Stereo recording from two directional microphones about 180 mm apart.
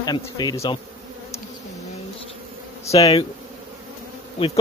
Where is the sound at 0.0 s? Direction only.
20° left (ahead or behind).